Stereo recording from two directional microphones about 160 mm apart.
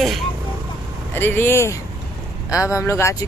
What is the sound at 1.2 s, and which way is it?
Speech, 15° left (ahead or behind).